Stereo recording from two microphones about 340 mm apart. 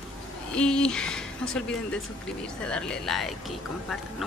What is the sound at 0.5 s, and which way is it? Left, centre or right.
Speech, centre.